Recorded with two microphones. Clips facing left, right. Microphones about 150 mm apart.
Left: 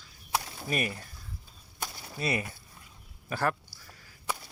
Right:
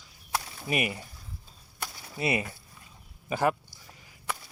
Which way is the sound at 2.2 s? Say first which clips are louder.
Right 3 dB; 20° right (ahead or behind).